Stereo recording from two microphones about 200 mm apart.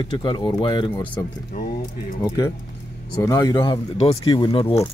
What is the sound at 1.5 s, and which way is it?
Speech, 45° left (ahead or behind).